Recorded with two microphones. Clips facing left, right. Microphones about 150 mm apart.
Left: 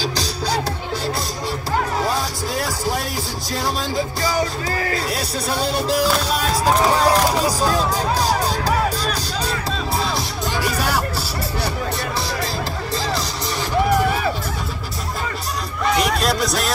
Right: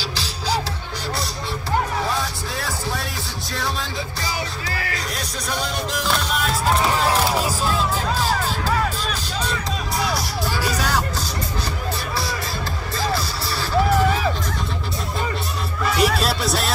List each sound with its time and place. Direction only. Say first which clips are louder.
0.0 s music: left 6 dB; 45° left (ahead or behind)
4.2 s music: left 6 dB; 45° left (ahead or behind)
4.9 s music: left 6 dB; 30° left (ahead or behind)
8.3 s music: left 3 dB; 15° left (ahead or behind)
9.0 s music: left 3 dB; 35° left (ahead or behind)
16.0 s music: right 1 dB; 5° right (ahead or behind)